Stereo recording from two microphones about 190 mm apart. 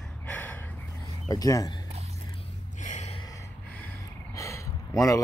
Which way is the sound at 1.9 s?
35° right (ahead or behind).